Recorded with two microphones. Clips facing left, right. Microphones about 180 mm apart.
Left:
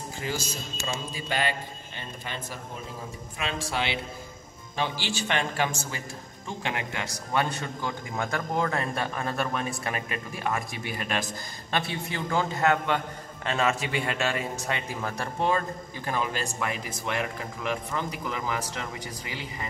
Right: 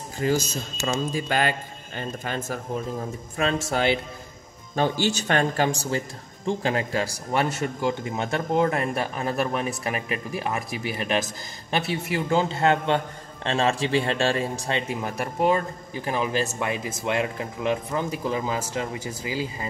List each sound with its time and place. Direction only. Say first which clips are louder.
0.2 s a man's voice: right 10 dB; 45° right (ahead or behind); by 19.3 s 25° right (ahead or behind)